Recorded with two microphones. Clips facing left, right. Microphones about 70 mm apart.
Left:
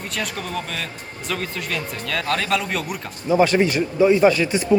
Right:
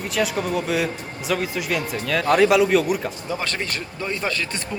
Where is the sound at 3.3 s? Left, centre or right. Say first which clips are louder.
Left 13 dB; centre.